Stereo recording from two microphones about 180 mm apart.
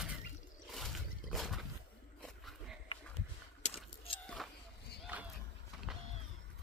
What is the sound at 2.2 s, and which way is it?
Dog, centre (ahead or behind).